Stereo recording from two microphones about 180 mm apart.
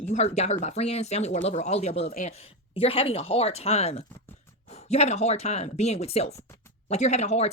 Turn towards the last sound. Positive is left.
turn(degrees=40)  # may be behind; listen again after turning